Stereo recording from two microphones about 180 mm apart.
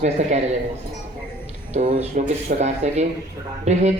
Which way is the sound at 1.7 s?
50° right (ahead or behind).